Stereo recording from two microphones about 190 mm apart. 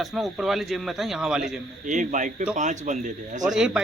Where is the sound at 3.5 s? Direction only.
5° right (ahead or behind).